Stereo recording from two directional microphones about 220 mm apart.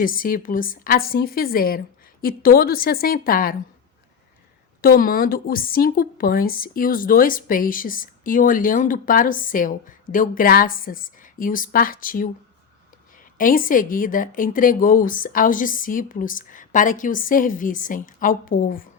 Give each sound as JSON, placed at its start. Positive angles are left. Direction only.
{"t": 0.0, "sound": "a woman's voice", "side_deg": 40}
{"t": 4.8, "sound": "a woman's voice", "side_deg": 40}
{"t": 13.4, "sound": "a woman's voice", "side_deg": 40}